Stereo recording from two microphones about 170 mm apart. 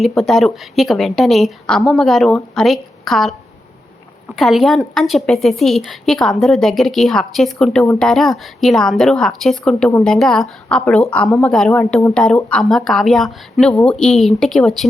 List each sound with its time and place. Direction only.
0.2 s a woman's voice: centre (ahead or behind)
4.4 s a woman's voice: centre (ahead or behind)